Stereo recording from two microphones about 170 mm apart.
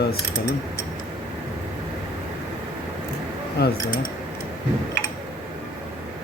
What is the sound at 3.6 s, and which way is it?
Speech, 70° left (ahead or behind).